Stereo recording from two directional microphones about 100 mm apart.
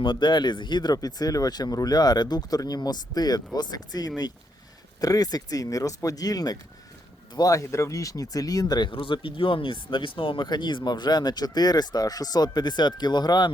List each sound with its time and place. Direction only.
0.0 s speech: 50° left (ahead or behind)
8.9 s speech: 55° left (ahead or behind)